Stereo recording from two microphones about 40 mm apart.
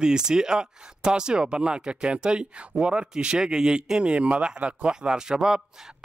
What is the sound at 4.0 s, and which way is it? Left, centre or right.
Speech, right.